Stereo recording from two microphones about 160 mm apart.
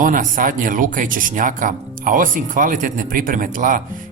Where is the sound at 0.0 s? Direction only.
55° right (ahead or behind).